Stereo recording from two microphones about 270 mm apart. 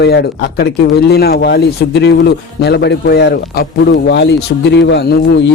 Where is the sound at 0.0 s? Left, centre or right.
Left.